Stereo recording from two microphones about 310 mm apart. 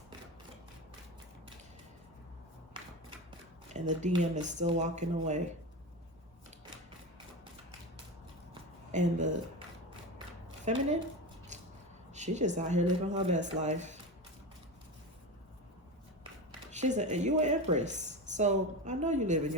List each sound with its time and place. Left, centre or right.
3.7 s a woman's voice: right
8.9 s speech: right
10.7 s a woman's voice: right
12.1 s a woman's voice: right
16.7 s a woman's voice: right